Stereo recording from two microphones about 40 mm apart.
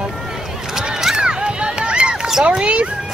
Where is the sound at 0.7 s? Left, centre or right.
Centre.